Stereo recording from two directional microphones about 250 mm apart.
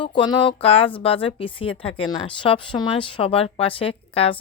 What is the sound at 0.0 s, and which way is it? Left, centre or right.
Speech, centre.